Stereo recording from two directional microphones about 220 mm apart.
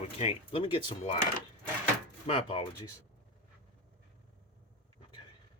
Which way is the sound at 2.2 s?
25° left (ahead or behind).